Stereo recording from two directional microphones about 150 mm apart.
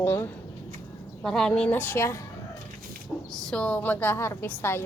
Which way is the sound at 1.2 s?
5° left (ahead or behind).